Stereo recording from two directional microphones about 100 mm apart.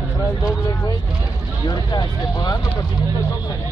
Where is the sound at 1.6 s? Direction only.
45° left (ahead or behind).